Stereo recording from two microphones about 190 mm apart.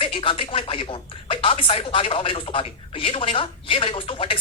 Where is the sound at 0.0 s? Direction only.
25° left (ahead or behind).